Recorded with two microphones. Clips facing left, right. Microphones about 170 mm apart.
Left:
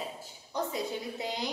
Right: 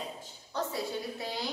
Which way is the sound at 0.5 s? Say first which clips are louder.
Left 1 dB; 20° left (ahead or behind).